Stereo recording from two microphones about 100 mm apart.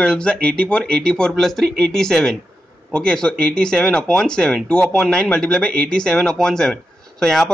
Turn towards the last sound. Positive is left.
turn(degrees=5)  # may be behind; listen again after turning